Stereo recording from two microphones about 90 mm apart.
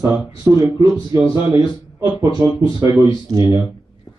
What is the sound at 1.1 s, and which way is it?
Speech, 45° right (ahead or behind).